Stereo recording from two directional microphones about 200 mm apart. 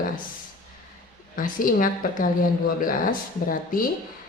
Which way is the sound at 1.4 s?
45° left (ahead or behind).